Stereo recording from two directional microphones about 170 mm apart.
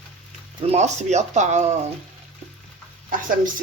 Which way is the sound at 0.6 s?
40° right (ahead or behind).